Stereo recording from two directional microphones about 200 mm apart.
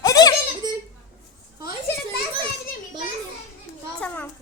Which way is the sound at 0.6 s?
20° right (ahead or behind).